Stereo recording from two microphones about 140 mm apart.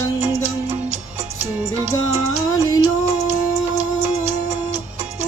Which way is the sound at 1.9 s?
25° left (ahead or behind).